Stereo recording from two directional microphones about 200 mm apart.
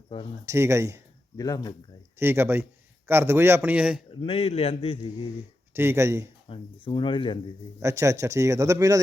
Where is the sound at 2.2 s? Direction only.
10° right (ahead or behind).